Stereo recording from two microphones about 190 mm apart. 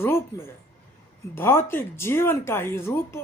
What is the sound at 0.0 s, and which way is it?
Speech, 15° left (ahead or behind).